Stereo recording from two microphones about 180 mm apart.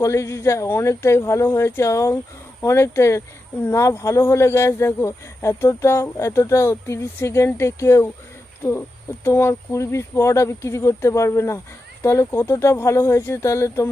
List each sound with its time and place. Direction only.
0.0 s speech: 15° left (ahead or behind)
9.2 s speech: 15° left (ahead or behind)